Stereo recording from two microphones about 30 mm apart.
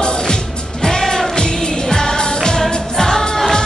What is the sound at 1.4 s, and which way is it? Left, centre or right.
Music of asia, left.